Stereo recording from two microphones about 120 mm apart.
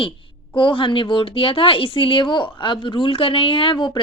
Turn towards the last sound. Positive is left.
turn(degrees=40)  # may be behind; listen again after turning